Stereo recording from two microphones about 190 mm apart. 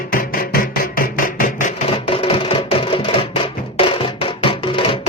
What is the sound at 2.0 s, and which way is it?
Music, 30° left (ahead or behind).